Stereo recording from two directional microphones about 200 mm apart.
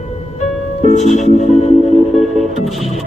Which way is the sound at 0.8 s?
35° left (ahead or behind).